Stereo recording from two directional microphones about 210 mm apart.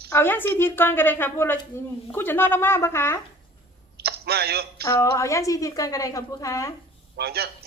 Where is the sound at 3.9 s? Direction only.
50° right (ahead or behind).